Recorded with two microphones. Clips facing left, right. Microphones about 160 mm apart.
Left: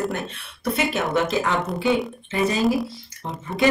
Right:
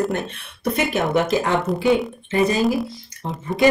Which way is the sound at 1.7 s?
Centre (ahead or behind).